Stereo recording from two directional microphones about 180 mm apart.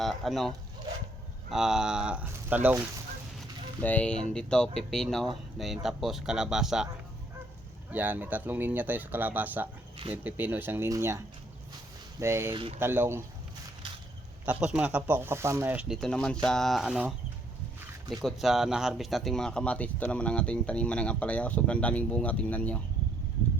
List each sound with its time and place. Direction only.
0.0 s speech: centre (ahead or behind)
3.8 s speech: 10° left (ahead or behind)
7.9 s speech: 10° right (ahead or behind)
12.2 s speech: 15° right (ahead or behind)
12.5 s speech: 30° right (ahead or behind)
12.8 s speech: 10° right (ahead or behind)
14.4 s speech: 5° right (ahead or behind)
18.2 s speech: centre (ahead or behind)